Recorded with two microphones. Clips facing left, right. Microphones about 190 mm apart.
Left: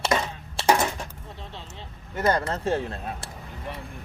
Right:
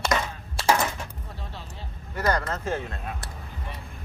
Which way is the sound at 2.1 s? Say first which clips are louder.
Left 2 dB; 25° left (ahead or behind).